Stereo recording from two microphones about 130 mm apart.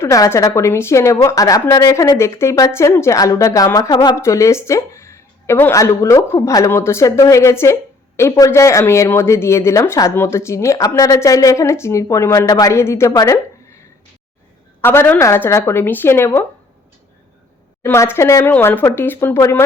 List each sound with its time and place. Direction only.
0.0 s a woman's voice: 20° left (ahead or behind)
14.8 s speech: 20° left (ahead or behind)
17.8 s a woman's voice: 20° left (ahead or behind)